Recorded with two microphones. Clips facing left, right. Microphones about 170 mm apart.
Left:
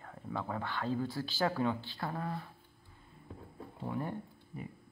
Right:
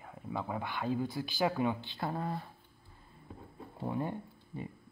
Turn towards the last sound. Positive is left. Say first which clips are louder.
# right 1 dB
turn(degrees=-20)  # may be behind; listen again after turning